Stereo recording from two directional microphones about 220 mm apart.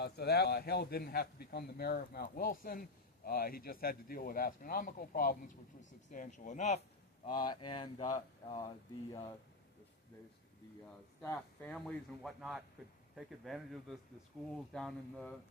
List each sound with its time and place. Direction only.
0.0 s a man's voice: 50° left (ahead or behind)
7.3 s speech: 20° left (ahead or behind)
11.2 s speech: 10° left (ahead or behind)